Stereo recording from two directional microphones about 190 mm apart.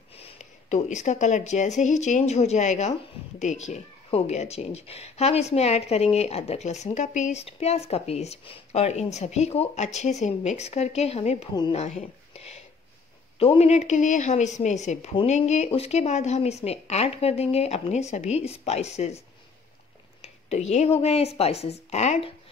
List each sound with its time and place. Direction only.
0.2 s speech: 40° left (ahead or behind)